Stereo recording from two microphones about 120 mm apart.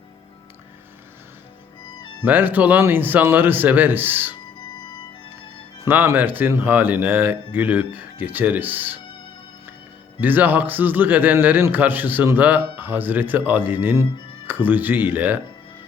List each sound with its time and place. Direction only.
2.2 s speech: 15° right (ahead or behind)
5.8 s speech: 20° right (ahead or behind)
10.2 s speech: 15° right (ahead or behind)